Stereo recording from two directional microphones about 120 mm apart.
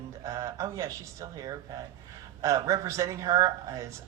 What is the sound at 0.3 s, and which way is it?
Speech, 30° right (ahead or behind).